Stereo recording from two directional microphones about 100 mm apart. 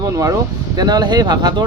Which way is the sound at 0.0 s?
35° right (ahead or behind).